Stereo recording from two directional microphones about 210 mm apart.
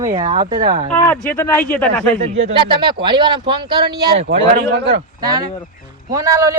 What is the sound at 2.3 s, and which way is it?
Speech, 25° right (ahead or behind).